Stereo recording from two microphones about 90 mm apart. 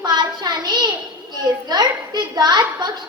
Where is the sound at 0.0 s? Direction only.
55° right (ahead or behind).